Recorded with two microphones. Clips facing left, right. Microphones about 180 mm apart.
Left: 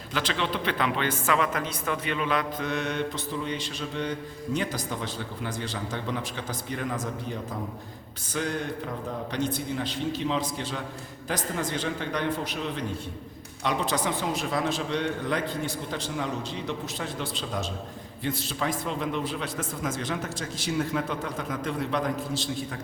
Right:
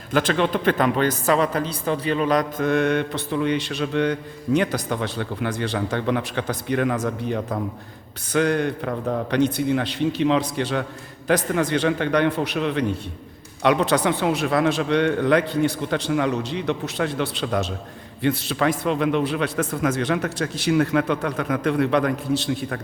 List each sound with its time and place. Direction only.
0.1 s a man's voice: 50° right (ahead or behind); by 22.8 s 65° right (ahead or behind)